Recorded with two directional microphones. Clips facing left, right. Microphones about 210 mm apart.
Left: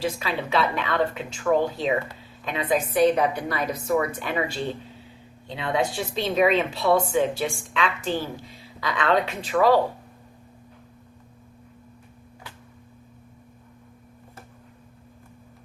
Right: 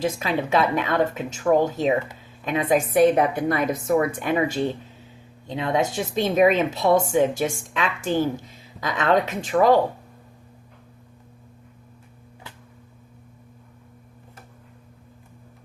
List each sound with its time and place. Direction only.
0.0 s speech: 45° right (ahead or behind)